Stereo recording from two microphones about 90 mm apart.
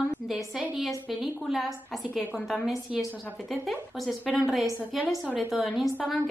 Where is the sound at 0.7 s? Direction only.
5° right (ahead or behind).